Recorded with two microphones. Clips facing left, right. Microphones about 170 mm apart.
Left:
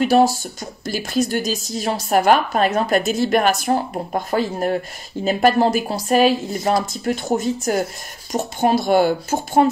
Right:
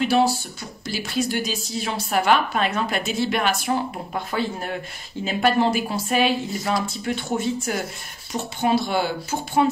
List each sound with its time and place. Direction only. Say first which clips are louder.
0.0 s a woman's voice: left 4 dB; 45° left (ahead or behind)